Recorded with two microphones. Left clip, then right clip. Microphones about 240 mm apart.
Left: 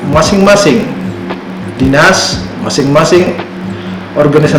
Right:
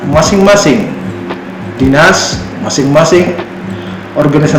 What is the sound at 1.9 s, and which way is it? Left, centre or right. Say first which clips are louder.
A man's voice: even; centre.